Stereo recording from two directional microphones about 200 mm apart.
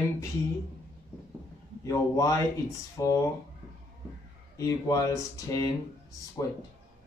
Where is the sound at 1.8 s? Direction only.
15° left (ahead or behind).